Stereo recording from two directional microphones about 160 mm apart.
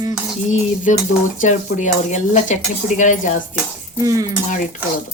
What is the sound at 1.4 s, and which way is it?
Speech, 50° left (ahead or behind).